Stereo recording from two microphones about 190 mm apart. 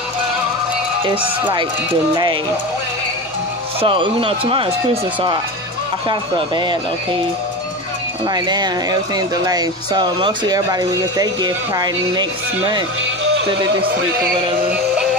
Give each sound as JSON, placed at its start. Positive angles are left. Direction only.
{"t": 1.0, "sound": "speech", "side_deg": -25}
{"t": 3.8, "sound": "speech", "side_deg": -25}
{"t": 6.0, "sound": "speech", "side_deg": -25}
{"t": 8.3, "sound": "speech", "side_deg": -20}